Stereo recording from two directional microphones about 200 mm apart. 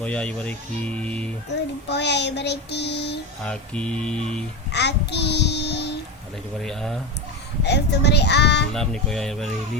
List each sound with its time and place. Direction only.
0.0 s speech: 5° left (ahead or behind)
1.5 s child singing: 60° left (ahead or behind)
3.4 s speech: 5° left (ahead or behind)
4.7 s child singing: 60° left (ahead or behind)
6.6 s speech: centre (ahead or behind)
7.6 s child singing: 60° left (ahead or behind)
8.7 s speech: 5° left (ahead or behind)